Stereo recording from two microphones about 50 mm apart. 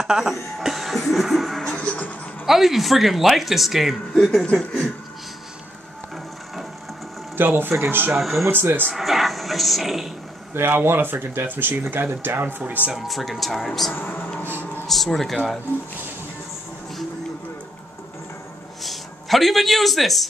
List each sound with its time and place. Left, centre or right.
0.0 s speech: centre
1.7 s music: left
2.4 s speech: centre
7.3 s speech: right
8.2 s speech: centre
8.5 s speech: right
8.9 s speech: centre
10.5 s speech: right
12.9 s speech: centre
13.9 s speech: left
14.9 s speech: centre
18.8 s a man's voice: centre